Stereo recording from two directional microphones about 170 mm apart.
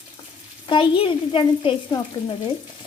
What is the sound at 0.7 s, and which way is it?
Speech, 30° left (ahead or behind).